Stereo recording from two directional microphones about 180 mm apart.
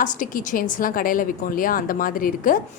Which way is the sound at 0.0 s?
50° left (ahead or behind).